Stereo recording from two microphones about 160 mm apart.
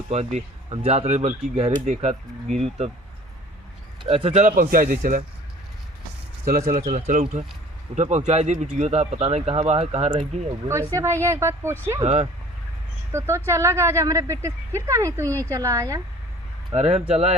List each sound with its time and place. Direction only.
0.1 s speech: 45° right (ahead or behind)
4.0 s speech: 40° right (ahead or behind); by 5.2 s 60° right (ahead or behind)
6.4 s speech: 60° right (ahead or behind)
7.9 s speech: 45° right (ahead or behind)
10.7 s speech: 15° right (ahead or behind)
13.1 s speech: 15° right (ahead or behind)
16.7 s speech: 40° right (ahead or behind)